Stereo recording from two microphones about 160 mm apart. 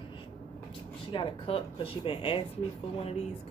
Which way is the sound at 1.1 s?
30° left (ahead or behind).